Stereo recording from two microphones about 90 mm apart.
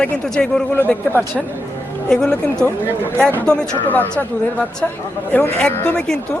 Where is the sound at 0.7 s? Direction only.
20° left (ahead or behind).